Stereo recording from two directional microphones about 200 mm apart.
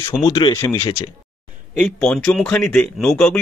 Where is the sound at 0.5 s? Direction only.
10° left (ahead or behind).